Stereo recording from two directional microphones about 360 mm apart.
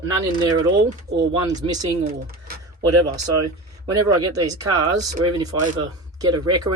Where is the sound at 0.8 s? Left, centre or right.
Right.